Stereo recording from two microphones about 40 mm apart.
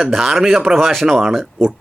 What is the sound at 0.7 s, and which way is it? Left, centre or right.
Speech, centre.